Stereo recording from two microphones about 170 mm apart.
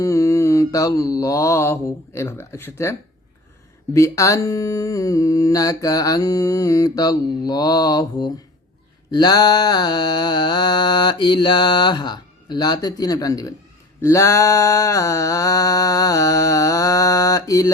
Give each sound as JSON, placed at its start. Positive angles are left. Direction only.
{"t": 0.0, "sound": "speech", "side_deg": 20}
{"t": 3.9, "sound": "speech", "side_deg": 20}